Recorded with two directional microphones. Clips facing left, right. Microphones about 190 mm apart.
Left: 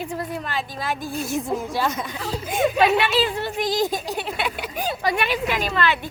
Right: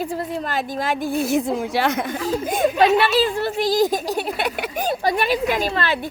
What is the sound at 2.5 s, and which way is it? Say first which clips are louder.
Speech: right 1 dB; 35° right (ahead or behind).